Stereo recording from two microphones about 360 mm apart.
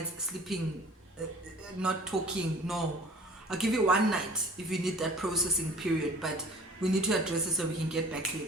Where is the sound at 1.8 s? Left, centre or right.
Centre.